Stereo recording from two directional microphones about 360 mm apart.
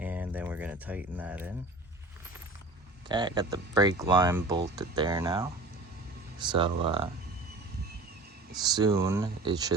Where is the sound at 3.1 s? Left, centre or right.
Centre.